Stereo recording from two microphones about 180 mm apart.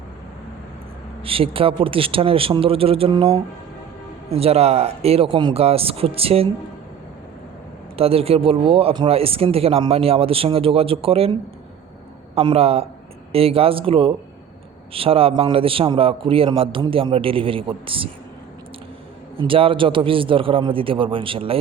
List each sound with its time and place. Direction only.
1.2 s speech: 30° right (ahead or behind)
7.9 s speech: 35° right (ahead or behind)
19.4 s a man's voice: 30° right (ahead or behind)